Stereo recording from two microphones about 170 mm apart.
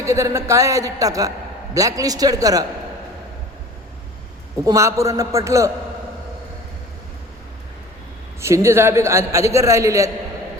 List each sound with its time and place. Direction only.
0.0 s a man's voice: 15° right (ahead or behind)
4.5 s a man's voice: 20° right (ahead or behind)
8.4 s a man's voice: 15° right (ahead or behind)